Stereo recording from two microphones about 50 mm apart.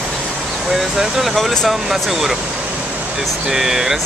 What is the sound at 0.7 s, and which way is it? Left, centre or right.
Speech, centre.